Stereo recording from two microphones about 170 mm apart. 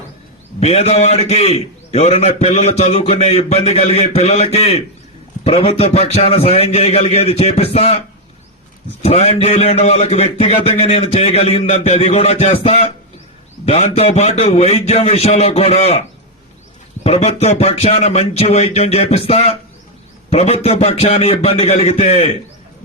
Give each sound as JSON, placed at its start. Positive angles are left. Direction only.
{"t": 0.6, "sound": "a man's voice", "side_deg": 40}
{"t": 9.0, "sound": "a man's voice", "side_deg": 35}